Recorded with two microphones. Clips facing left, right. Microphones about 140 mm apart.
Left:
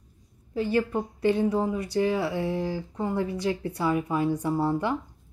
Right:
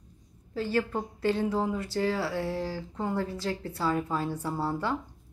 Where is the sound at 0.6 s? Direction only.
15° left (ahead or behind).